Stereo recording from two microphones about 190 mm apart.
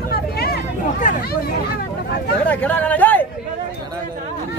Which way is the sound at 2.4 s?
10° left (ahead or behind).